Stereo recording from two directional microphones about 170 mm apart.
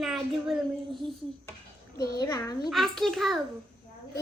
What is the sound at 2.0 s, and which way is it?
Speech, 20° left (ahead or behind).